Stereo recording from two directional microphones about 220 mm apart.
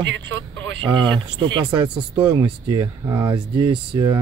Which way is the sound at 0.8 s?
20° right (ahead or behind).